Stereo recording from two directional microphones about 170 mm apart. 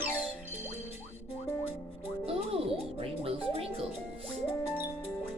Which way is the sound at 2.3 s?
35° right (ahead or behind).